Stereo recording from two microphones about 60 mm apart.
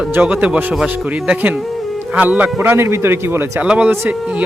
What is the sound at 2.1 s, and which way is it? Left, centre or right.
Speech, right.